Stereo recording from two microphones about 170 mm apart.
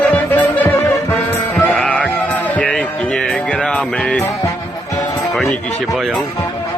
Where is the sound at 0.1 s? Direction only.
10° left (ahead or behind).